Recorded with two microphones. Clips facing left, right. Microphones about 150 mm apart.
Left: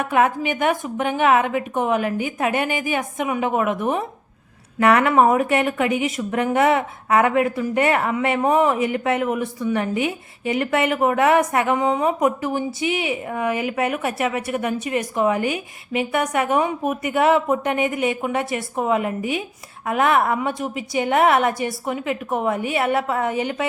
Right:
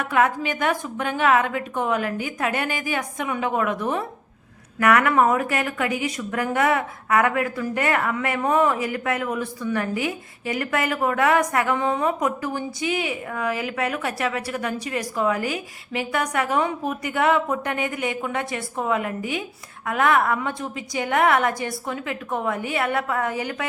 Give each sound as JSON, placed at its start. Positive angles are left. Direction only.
{"t": 0.0, "sound": "a woman's voice", "side_deg": 20}